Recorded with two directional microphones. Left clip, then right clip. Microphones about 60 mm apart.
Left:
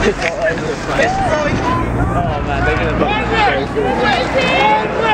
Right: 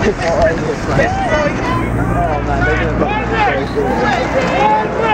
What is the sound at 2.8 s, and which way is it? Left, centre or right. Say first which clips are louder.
Vehicle: even; left.